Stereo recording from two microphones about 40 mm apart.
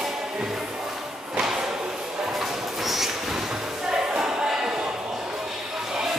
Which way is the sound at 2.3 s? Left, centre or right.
Centre.